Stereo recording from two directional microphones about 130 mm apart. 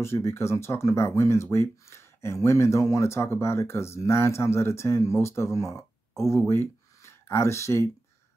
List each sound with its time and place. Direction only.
0.0 s speech: 20° left (ahead or behind)